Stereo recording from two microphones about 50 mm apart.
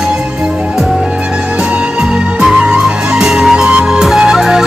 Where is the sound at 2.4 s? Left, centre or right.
Centre.